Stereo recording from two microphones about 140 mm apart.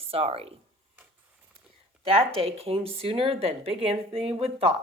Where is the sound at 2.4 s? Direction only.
45° right (ahead or behind).